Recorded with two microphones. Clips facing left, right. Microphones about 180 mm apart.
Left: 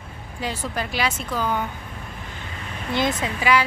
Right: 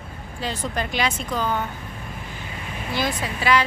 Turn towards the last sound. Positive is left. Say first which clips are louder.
# even
turn(degrees=15)  # may be behind; listen again after turning